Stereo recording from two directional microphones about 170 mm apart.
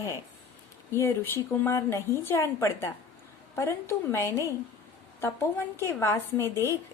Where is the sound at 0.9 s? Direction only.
15° left (ahead or behind).